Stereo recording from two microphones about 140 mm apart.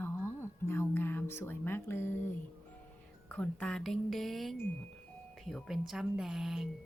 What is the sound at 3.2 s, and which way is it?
A woman's voice, 10° left (ahead or behind).